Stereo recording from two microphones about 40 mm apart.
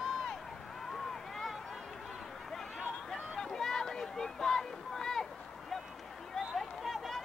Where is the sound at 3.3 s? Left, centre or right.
Centre.